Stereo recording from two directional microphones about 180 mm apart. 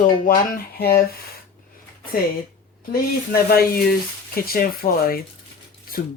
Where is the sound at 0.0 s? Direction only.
55° left (ahead or behind).